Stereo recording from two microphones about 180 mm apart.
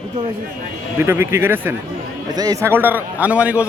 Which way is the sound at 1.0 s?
15° right (ahead or behind).